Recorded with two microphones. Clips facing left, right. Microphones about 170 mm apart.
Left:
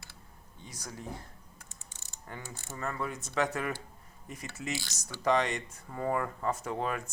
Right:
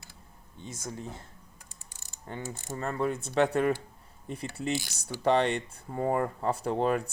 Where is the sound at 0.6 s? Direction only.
25° right (ahead or behind).